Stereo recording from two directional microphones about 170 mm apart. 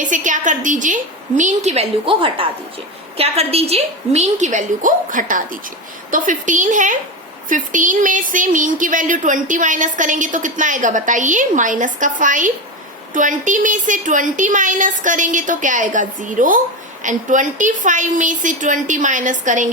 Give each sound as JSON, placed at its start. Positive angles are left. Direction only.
{"t": 0.0, "sound": "speech", "side_deg": -50}